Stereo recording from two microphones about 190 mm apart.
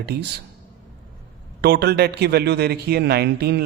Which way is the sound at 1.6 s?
60° right (ahead or behind).